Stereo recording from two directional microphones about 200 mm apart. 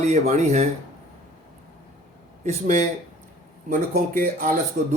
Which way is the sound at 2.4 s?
35° right (ahead or behind).